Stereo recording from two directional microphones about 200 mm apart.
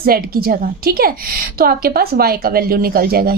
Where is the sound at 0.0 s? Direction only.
50° right (ahead or behind).